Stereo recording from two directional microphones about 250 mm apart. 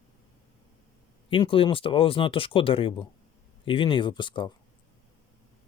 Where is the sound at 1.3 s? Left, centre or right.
Left.